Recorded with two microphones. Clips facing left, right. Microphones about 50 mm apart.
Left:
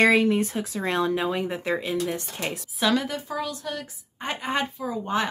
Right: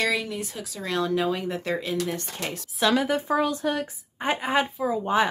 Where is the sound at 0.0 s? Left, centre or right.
Left.